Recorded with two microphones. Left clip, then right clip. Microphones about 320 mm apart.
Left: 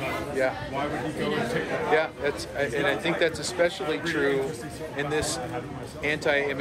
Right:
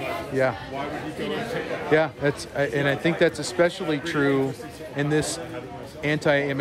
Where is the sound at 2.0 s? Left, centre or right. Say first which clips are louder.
Right 3 dB; right.